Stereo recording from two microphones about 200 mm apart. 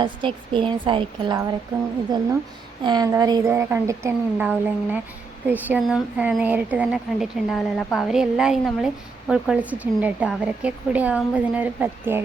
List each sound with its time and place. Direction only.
0.0 s a woman's voice: 25° right (ahead or behind)
2.8 s speech: 20° right (ahead or behind)